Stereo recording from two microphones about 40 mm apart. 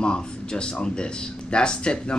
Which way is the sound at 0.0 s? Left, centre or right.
Left.